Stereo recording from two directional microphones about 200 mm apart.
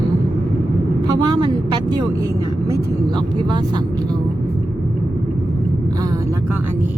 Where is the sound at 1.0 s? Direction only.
20° right (ahead or behind).